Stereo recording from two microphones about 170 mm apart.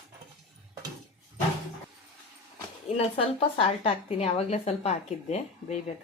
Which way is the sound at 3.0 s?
35° left (ahead or behind).